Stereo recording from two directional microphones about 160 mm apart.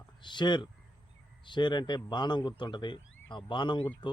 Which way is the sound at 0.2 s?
30° left (ahead or behind).